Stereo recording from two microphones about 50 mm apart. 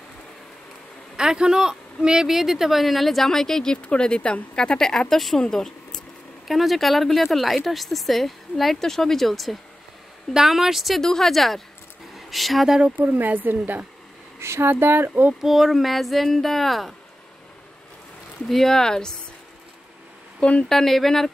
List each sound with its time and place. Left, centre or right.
1.1 s speech: centre
6.4 s speech: centre
11.0 s speech: centre
13.0 s speech: right
14.4 s speech: right
14.7 s speech: right
15.4 s speech: centre
18.5 s speech: centre
20.3 s speech: left
20.6 s speech: centre